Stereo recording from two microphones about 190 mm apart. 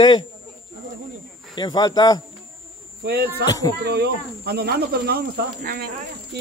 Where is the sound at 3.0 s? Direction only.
55° right (ahead or behind).